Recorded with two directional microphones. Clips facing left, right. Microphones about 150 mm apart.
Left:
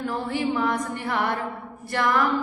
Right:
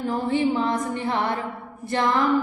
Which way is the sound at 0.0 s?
20° right (ahead or behind).